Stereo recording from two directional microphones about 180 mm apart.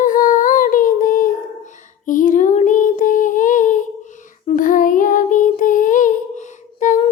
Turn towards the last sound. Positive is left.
turn(degrees=45)  # may be behind; listen again after turning